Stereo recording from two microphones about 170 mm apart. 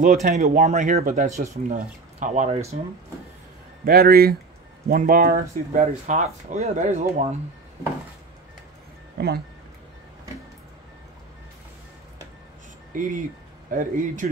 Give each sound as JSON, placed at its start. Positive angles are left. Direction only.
{"t": 0.0, "sound": "speech", "side_deg": -60}
{"t": 0.6, "sound": "speech", "side_deg": -45}
{"t": 3.8, "sound": "speech", "side_deg": -60}
{"t": 6.1, "sound": "speech", "side_deg": -40}
{"t": 12.9, "sound": "speech", "side_deg": -50}